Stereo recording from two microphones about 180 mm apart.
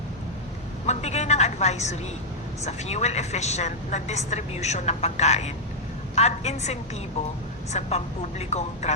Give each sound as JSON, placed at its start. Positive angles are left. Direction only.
{"t": 0.9, "sound": "a woman's voice", "side_deg": 40}